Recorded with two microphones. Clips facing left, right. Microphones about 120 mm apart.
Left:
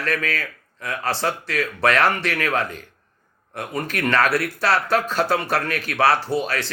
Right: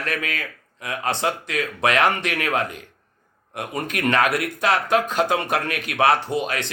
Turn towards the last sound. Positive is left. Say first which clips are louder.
# left 1 dB
turn(degrees=-20)  # may be behind; listen again after turning